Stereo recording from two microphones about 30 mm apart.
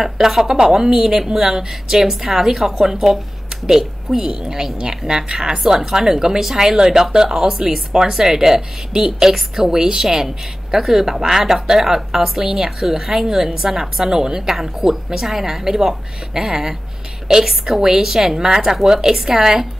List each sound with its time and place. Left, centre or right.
0.0 s a woman's voice: centre
0.4 s a woman's voice: right
4.7 s a woman's voice: right
14.5 s a woman's voice: centre